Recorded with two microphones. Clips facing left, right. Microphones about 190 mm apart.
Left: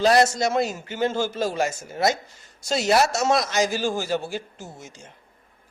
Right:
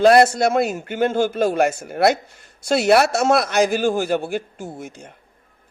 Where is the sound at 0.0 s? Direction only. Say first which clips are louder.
Right 5 dB; 60° right (ahead or behind).